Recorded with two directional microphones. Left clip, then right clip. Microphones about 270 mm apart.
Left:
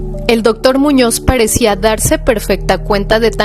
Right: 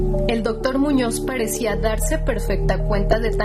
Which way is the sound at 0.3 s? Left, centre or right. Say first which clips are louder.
Left 15 dB; left.